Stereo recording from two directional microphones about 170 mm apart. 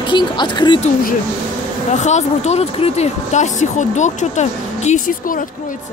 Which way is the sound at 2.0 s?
45° left (ahead or behind).